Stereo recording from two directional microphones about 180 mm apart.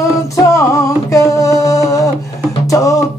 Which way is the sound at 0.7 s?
15° left (ahead or behind).